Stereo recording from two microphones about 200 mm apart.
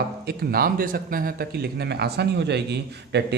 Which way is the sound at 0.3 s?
50° right (ahead or behind).